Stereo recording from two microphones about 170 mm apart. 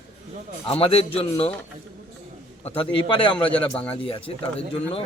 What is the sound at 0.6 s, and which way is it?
Speech, 30° left (ahead or behind).